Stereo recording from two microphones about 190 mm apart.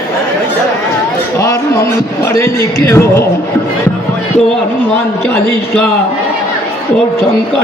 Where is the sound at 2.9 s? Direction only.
15° left (ahead or behind).